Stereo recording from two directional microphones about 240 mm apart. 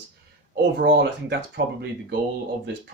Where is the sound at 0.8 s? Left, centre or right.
Right.